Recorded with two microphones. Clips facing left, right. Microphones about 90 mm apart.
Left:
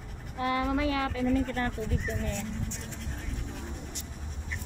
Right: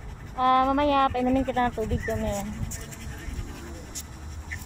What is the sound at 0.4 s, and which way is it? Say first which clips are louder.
Speech: right 8 dB; 60° right (ahead or behind).